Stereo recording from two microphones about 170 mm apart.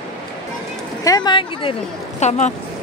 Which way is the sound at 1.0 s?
20° left (ahead or behind).